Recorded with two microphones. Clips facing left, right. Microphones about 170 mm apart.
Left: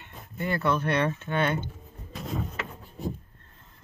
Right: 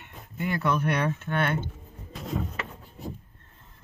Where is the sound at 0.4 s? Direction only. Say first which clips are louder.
Even; 10° right (ahead or behind).